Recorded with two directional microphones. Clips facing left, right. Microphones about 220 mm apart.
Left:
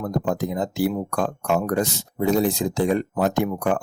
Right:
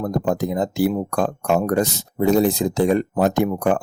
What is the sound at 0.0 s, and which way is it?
Speech, 40° right (ahead or behind).